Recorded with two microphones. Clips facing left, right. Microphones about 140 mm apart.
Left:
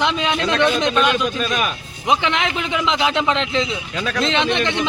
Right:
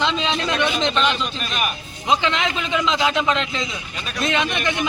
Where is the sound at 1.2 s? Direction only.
90° left.